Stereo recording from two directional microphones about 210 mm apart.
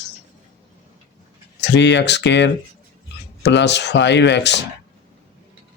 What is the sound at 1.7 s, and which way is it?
Speech, 55° left (ahead or behind).